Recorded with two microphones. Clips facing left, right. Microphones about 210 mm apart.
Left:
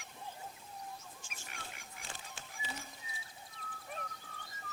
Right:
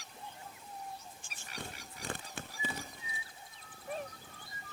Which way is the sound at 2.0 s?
55° right (ahead or behind).